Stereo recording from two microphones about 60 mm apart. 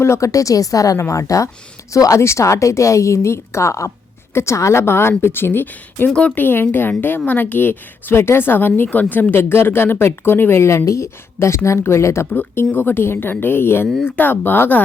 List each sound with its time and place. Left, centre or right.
0.0 s a woman's voice: left
0.9 s a woman's voice: left
2.2 s a woman's voice: left
12.3 s a woman's voice: left